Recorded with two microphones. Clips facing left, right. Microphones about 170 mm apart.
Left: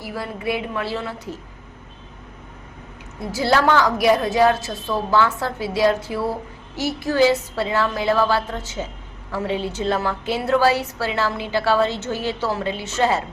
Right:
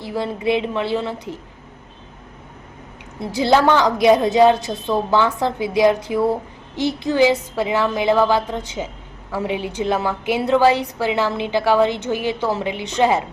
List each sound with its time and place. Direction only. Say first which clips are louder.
0.0 s a woman's voice: right 5 dB; 20° right (ahead or behind)
3.2 s a woman's voice: right 3 dB; 20° right (ahead or behind)